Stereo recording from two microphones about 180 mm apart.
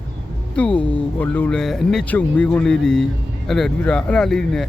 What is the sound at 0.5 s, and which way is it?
Speech, 5° left (ahead or behind).